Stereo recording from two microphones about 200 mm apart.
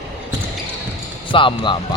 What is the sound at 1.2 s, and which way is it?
Speech, 25° left (ahead or behind).